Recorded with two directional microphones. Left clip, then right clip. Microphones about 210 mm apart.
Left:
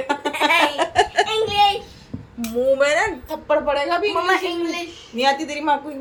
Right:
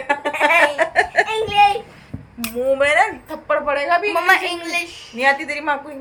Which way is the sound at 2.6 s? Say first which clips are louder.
Right 2 dB; 5° left (ahead or behind).